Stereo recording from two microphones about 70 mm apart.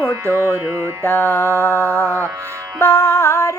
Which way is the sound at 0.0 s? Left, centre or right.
Right.